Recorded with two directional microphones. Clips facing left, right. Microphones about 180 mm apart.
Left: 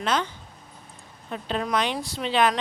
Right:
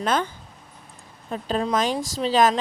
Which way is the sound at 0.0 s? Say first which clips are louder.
Right 2 dB; 50° right (ahead or behind).